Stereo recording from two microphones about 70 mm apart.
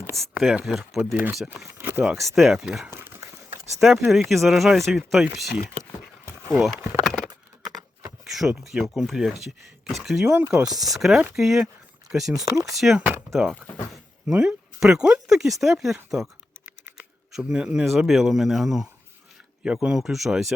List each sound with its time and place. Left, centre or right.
0.2 s speech: centre
2.1 s speech: centre
2.9 s speech: right
3.2 s a sound: right
3.8 s speech: centre
7.1 s a sound: centre
8.2 s speech: centre
12.5 s speech: right
12.7 s speech: centre
13.0 s speech: right
13.3 s speech: centre
17.5 s speech: centre
17.8 s speech: centre